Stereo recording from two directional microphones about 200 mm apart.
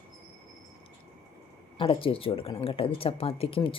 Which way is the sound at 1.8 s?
25° left (ahead or behind).